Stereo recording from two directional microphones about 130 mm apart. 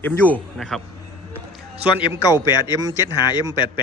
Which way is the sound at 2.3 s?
30° left (ahead or behind).